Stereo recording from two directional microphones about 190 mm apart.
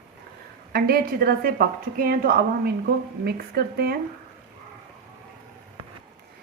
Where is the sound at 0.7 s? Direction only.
55° right (ahead or behind).